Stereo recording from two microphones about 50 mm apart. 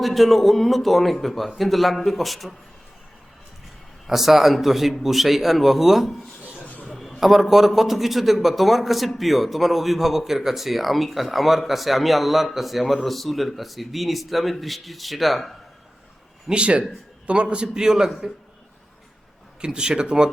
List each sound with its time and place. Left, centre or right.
0.0 s a man's voice: centre
4.0 s a man's voice: centre
6.9 s a sound: centre
7.2 s a man's voice: centre
16.5 s a man's voice: right
19.6 s a man's voice: centre